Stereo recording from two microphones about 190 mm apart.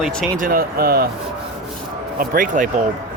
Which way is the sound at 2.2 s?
45° right (ahead or behind).